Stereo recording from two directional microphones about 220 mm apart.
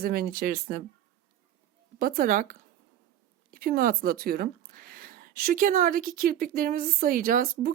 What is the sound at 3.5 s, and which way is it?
Speech, 40° right (ahead or behind).